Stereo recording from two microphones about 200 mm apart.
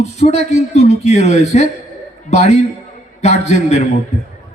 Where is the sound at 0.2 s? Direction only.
35° left (ahead or behind).